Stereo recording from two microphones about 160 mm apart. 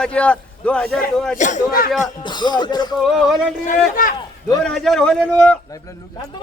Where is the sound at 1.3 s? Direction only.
50° left (ahead or behind).